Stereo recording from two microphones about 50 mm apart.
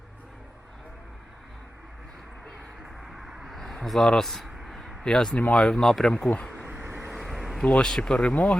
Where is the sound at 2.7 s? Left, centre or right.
Centre.